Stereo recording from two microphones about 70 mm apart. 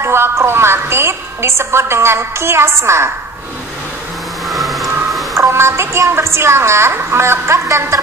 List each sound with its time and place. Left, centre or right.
0.0 s a woman's voice: right
4.5 s vehicle: centre
5.3 s a woman's voice: right